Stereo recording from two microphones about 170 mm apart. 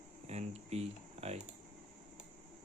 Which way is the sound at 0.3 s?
40° right (ahead or behind).